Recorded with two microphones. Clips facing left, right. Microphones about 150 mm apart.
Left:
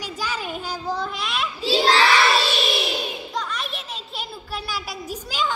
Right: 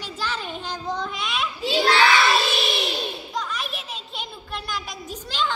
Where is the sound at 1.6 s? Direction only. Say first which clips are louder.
Left 1 dB; 30° left (ahead or behind).